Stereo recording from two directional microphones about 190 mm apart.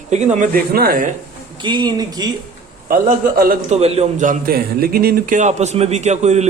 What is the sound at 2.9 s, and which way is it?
Speech, 50° right (ahead or behind).